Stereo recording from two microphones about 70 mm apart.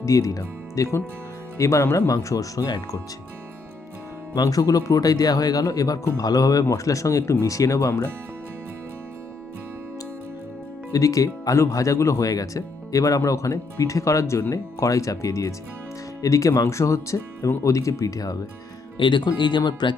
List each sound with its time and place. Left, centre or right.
0.0 s speech: left
4.4 s speech: left
10.9 s speech: left
19.2 s speech: left